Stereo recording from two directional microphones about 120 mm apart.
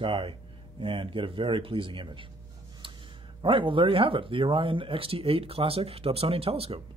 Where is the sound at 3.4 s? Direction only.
45° right (ahead or behind).